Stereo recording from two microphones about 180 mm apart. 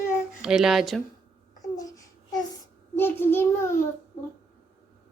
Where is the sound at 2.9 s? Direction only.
10° left (ahead or behind).